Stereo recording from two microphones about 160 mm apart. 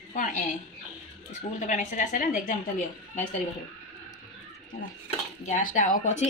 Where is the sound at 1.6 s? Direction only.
50° left (ahead or behind).